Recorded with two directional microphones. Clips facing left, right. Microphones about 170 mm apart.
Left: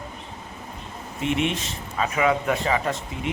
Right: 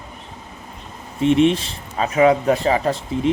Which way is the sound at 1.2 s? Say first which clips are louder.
Right 9 dB; 35° right (ahead or behind).